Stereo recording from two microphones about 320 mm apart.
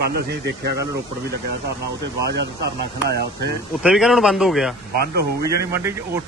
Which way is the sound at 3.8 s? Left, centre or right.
Centre.